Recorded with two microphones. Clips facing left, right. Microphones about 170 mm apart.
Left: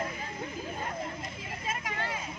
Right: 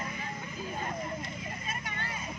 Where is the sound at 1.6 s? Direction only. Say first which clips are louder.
Left 4 dB; 90° left.